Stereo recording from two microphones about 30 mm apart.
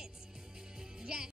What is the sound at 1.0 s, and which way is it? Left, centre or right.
Music, right.